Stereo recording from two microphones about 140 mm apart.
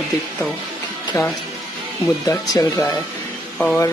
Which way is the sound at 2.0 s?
25° left (ahead or behind).